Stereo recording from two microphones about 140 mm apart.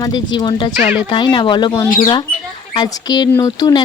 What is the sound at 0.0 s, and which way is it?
Speech, 30° left (ahead or behind).